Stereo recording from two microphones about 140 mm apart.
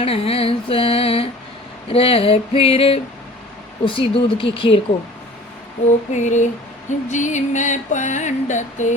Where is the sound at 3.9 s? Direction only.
40° left (ahead or behind).